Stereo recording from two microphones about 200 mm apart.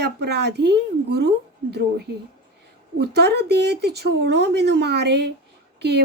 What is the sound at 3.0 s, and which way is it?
Speech, 55° right (ahead or behind).